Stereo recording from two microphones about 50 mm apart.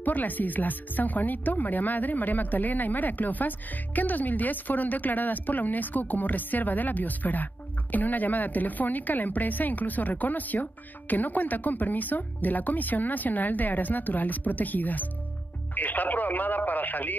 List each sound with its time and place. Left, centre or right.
0.0 s speech: left